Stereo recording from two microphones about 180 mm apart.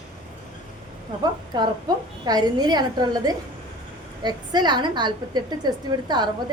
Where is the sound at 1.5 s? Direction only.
25° right (ahead or behind).